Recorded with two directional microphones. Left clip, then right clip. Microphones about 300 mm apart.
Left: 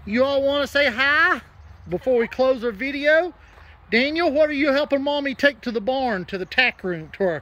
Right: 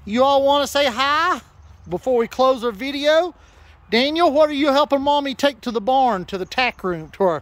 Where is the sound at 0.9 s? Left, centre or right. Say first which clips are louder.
Even; right.